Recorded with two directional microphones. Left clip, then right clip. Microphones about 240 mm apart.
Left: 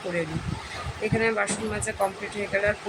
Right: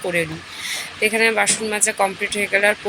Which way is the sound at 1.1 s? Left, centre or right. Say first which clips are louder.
Right 6 dB; centre.